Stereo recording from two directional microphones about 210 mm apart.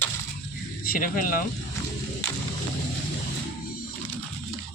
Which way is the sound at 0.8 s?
45° left (ahead or behind).